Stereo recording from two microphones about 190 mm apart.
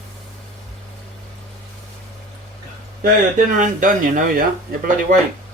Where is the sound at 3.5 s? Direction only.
45° right (ahead or behind).